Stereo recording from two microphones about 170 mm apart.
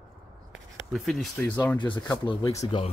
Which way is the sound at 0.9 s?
Centre (ahead or behind).